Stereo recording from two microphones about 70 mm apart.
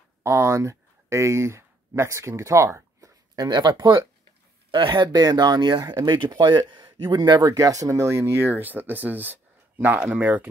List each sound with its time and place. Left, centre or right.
0.2 s speech: right
3.3 s speech: right
7.5 s speech: right
8.5 s speech: right